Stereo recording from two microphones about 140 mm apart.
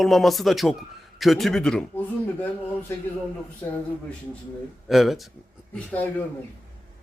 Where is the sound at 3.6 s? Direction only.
20° left (ahead or behind).